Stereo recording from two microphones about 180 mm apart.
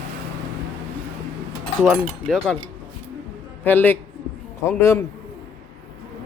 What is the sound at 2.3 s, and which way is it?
Speech, 5° left (ahead or behind).